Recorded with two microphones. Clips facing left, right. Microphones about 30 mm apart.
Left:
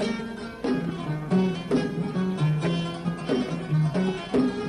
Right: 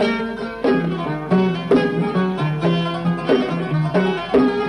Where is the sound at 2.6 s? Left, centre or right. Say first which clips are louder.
Right 8 dB; right.